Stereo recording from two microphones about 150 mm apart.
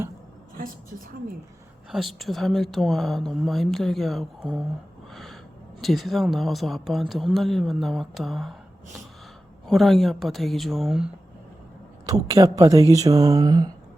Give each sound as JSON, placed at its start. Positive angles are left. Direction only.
{"t": 0.5, "sound": "a sound", "side_deg": -65}
{"t": 1.9, "sound": "speech", "side_deg": 0}
{"t": 5.1, "sound": "snort", "side_deg": 0}
{"t": 5.8, "sound": "speech", "side_deg": 0}
{"t": 9.6, "sound": "speech", "side_deg": 0}
{"t": 12.0, "sound": "speech", "side_deg": -25}